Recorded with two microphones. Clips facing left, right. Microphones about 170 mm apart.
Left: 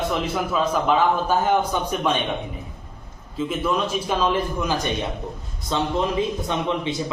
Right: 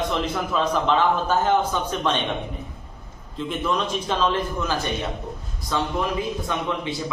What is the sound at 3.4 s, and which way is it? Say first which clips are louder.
A man's voice: left 2 dB; 5° left (ahead or behind).